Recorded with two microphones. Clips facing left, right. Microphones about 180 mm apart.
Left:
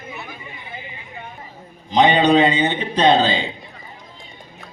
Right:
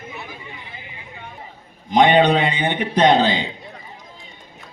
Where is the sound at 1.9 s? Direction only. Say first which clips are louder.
Right 2 dB; 50° right (ahead or behind).